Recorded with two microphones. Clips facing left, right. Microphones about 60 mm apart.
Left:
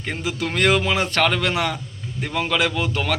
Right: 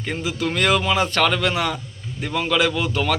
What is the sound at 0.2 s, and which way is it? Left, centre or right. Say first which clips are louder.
A man's voice: left 1 dB; left.